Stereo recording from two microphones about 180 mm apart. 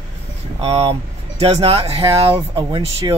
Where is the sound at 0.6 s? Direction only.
30° right (ahead or behind).